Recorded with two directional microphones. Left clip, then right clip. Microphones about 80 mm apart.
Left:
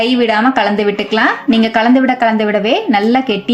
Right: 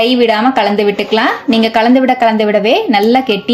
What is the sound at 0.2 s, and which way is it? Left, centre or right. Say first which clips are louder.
A woman's voice: right 2 dB; right.